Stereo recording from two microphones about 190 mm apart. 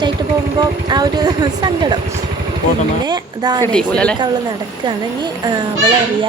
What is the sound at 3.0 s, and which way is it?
Speech, 20° right (ahead or behind).